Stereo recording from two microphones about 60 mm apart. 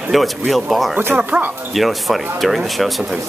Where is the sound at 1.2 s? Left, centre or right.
Right.